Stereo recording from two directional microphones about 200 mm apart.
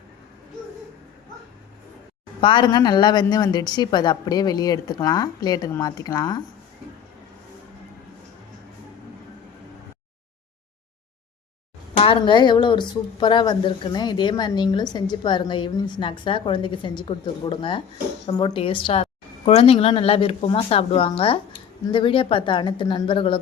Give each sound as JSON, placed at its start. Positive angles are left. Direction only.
{"t": 2.4, "sound": "a woman's voice", "side_deg": 25}
{"t": 11.9, "sound": "a woman's voice", "side_deg": 25}